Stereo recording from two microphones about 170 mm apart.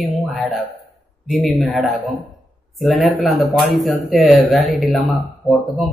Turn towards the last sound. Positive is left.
turn(degrees=0)  # may be behind; listen again after turning